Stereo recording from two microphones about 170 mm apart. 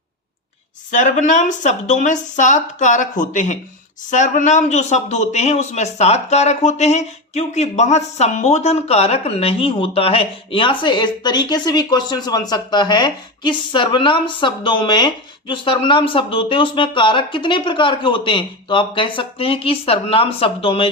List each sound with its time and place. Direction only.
0.9 s speech: 45° left (ahead or behind)